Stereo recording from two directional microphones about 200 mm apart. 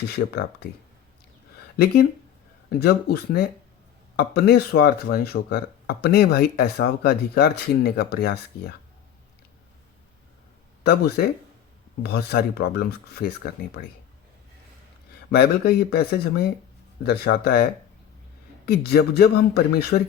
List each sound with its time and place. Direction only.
1.7 s speech: 50° left (ahead or behind)
10.8 s speech: 50° left (ahead or behind)
15.3 s speech: 50° left (ahead or behind)